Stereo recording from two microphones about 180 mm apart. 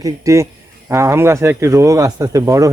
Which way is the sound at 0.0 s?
15° right (ahead or behind).